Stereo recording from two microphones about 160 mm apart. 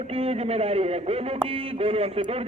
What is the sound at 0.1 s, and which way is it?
Speech, 35° right (ahead or behind).